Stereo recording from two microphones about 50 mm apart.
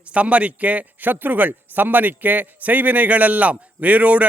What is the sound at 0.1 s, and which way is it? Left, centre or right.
A man's voice, right.